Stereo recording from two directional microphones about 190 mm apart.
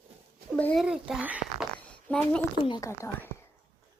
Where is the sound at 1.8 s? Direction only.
5° left (ahead or behind).